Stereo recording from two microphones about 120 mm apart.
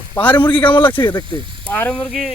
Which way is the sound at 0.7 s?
15° left (ahead or behind).